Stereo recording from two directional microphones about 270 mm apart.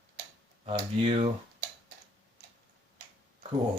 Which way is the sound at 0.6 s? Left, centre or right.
Right.